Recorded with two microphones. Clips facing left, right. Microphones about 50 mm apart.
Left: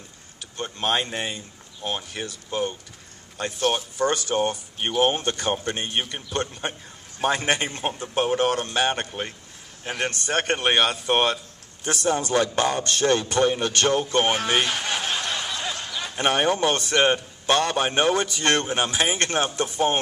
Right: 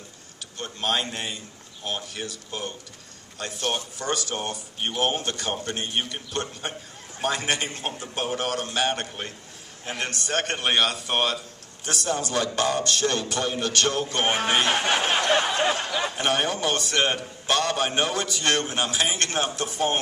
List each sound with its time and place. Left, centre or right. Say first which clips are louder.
0.6 s a man's voice: left 2 dB; left
14.6 s a sound: right 3 dB; right
16.2 s a man's voice: left 6 dB; left